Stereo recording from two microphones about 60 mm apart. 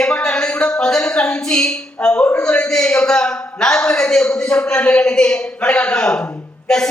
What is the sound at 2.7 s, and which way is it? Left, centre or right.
A woman's voice, centre.